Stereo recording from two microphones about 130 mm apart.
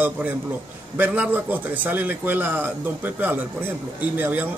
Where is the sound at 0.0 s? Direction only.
10° right (ahead or behind).